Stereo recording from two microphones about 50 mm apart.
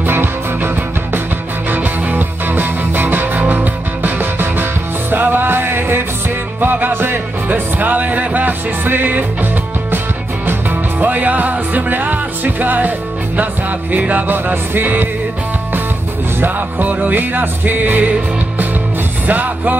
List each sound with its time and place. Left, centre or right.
0.0 s music: right
1.7 s music: right
16.3 s music: right
19.2 s music: right